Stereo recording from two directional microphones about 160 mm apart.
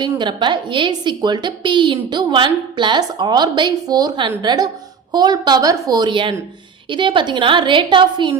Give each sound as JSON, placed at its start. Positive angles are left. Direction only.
{"t": 0.0, "sound": "a woman's voice", "side_deg": -30}